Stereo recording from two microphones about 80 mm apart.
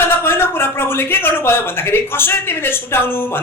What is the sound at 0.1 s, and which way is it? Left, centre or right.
Speech, left.